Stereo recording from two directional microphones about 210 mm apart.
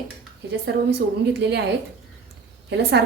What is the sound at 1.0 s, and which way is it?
Speech, 50° right (ahead or behind).